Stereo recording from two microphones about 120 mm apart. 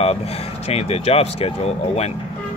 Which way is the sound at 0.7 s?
60° left (ahead or behind).